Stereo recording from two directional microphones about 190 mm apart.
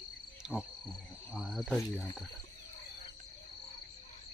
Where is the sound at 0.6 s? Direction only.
Centre (ahead or behind).